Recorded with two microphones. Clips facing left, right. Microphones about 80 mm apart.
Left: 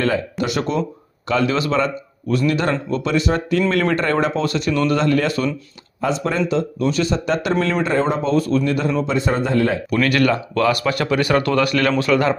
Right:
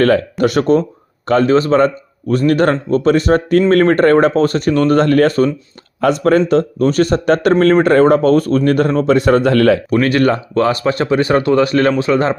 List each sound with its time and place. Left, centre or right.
0.0 s speech: right
6.0 s speech: right
9.9 s speech: right